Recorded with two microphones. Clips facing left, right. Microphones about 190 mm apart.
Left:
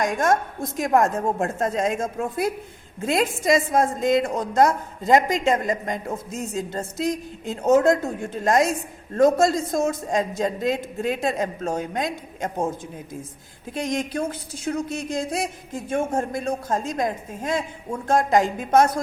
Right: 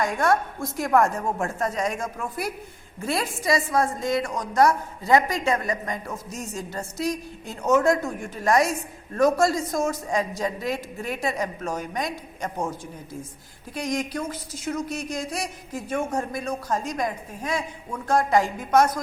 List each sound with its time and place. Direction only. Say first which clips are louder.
0.0 s a woman's voice: left 1 dB; 20° left (ahead or behind)
13.7 s a woman's voice: left 2 dB; 25° left (ahead or behind)